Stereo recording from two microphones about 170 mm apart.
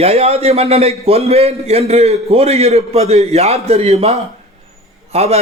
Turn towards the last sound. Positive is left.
turn(degrees=-40)  # may be behind; listen again after turning